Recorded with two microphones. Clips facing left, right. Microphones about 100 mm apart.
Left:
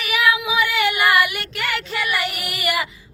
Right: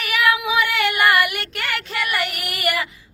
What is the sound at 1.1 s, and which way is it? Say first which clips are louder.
Child singing: left 1 dB; 55° right (ahead or behind).